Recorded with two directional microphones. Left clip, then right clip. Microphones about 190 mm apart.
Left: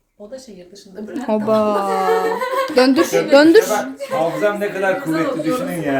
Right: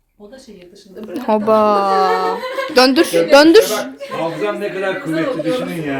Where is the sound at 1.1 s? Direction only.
15° right (ahead or behind).